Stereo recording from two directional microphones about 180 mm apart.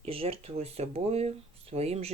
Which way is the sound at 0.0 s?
30° right (ahead or behind).